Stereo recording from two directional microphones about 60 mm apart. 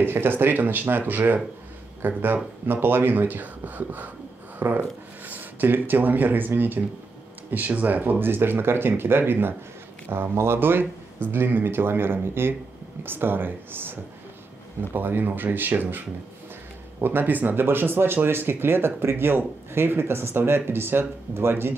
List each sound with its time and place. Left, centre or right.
0.0 s speech: right
17.0 s speech: right